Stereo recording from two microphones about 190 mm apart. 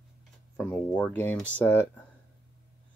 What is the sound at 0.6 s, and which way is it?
Speech, 5° left (ahead or behind).